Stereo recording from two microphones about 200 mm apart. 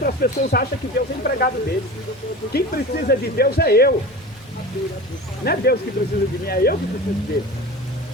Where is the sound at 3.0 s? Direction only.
50° left (ahead or behind).